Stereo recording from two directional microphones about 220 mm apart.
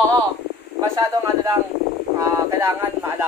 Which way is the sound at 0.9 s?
15° right (ahead or behind).